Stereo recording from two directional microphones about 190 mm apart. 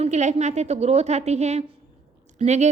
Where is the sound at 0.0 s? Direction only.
40° right (ahead or behind).